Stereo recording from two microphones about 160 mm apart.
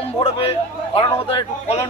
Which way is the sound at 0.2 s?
35° left (ahead or behind).